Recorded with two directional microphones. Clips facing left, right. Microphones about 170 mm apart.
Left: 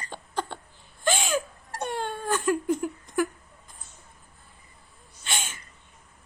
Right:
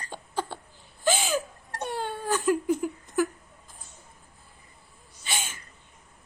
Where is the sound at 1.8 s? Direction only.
5° right (ahead or behind).